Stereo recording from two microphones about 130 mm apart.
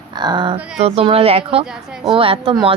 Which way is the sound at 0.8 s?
50° right (ahead or behind).